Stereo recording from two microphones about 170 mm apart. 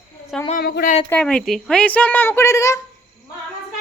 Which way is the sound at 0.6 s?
65° left (ahead or behind).